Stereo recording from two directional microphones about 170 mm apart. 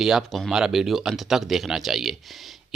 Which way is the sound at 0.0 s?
Centre (ahead or behind).